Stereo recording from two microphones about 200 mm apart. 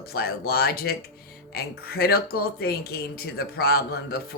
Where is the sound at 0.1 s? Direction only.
50° left (ahead or behind).